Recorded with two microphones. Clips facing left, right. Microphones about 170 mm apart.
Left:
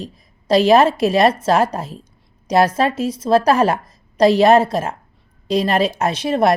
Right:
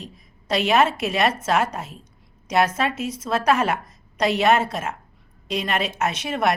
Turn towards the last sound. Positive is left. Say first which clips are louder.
# left 6 dB
turn(degrees=35)  # may be behind; listen again after turning